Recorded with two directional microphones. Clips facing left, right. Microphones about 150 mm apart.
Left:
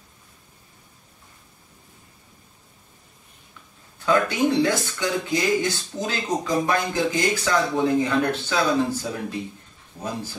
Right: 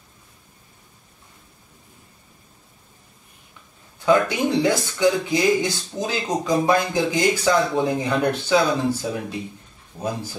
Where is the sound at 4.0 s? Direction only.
20° right (ahead or behind).